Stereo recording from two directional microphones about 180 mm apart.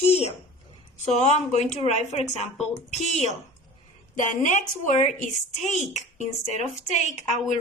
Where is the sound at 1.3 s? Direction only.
40° left (ahead or behind).